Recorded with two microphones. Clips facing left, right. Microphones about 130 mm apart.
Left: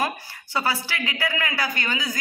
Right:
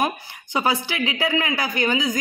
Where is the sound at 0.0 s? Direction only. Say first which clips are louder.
Right 3 dB; 20° right (ahead or behind).